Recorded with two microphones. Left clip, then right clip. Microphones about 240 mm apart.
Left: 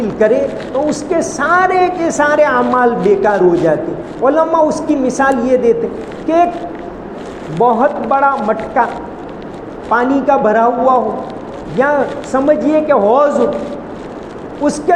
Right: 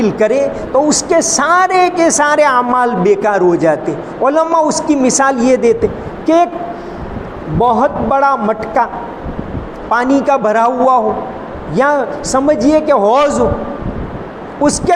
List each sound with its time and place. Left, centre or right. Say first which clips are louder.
0.0 s a woman's voice: even; right
7.6 s a woman's voice: even; right
9.9 s a woman's voice: even; right
14.6 s a woman's voice: right 2 dB; right